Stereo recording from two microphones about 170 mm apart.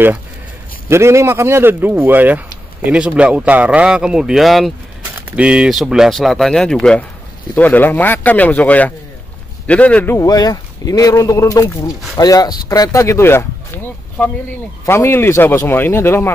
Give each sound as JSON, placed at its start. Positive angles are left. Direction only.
{"t": 0.8, "sound": "speech", "side_deg": -15}
{"t": 14.2, "sound": "speech", "side_deg": 5}